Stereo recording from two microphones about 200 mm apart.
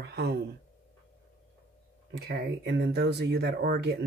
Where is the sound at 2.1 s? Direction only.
55° right (ahead or behind).